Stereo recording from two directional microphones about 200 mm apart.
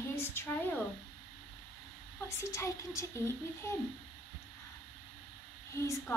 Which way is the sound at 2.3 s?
15° left (ahead or behind).